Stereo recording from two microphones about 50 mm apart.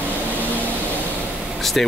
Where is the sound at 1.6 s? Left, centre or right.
Centre.